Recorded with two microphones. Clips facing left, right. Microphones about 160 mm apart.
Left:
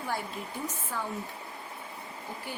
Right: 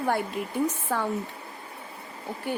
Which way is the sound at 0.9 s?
75° right (ahead or behind).